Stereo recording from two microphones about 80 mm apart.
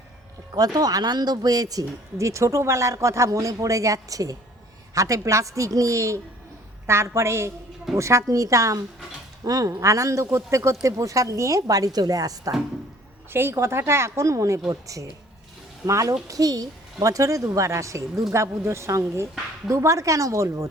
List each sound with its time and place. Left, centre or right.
0.5 s speech: right
13.3 s speech: right